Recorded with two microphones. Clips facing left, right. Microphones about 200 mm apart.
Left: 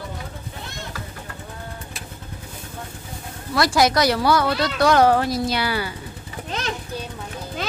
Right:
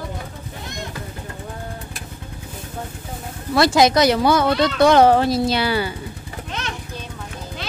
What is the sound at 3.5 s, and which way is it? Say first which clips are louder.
Speech: right 4 dB; 25° right (ahead or behind).